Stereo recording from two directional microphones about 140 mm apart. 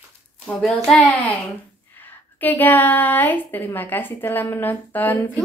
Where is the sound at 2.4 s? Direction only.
15° left (ahead or behind).